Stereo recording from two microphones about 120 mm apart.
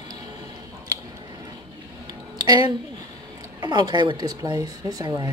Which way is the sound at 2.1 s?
35° right (ahead or behind).